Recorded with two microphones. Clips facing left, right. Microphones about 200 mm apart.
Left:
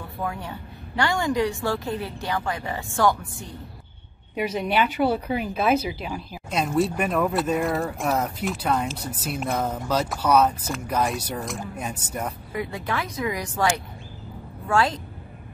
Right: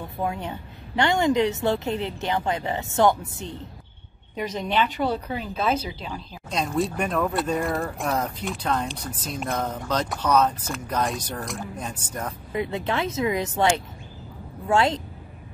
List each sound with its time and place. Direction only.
0.0 s speech: 20° right (ahead or behind)
4.4 s speech: 10° left (ahead or behind)
12.5 s speech: 25° right (ahead or behind)